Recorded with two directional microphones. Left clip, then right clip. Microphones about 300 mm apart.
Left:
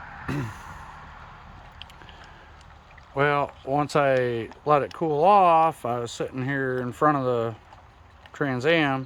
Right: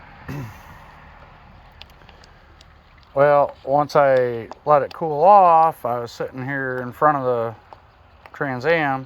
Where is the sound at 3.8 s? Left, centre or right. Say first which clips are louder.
Right 5 dB; centre.